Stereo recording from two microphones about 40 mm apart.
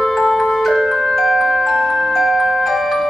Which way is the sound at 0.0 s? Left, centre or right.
Centre.